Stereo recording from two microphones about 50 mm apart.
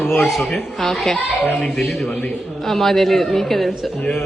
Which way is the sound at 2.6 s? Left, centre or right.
Centre.